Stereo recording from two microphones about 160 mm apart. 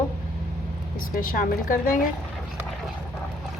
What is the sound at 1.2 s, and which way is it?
Speech, 60° left (ahead or behind).